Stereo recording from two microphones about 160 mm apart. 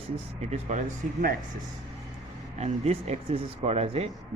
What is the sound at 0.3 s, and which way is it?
Speech, 45° right (ahead or behind).